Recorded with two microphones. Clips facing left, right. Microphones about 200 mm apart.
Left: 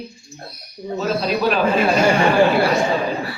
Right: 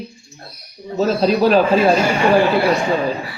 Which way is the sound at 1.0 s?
35° right (ahead or behind).